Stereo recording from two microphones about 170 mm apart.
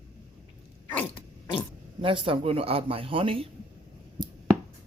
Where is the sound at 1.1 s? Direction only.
30° left (ahead or behind).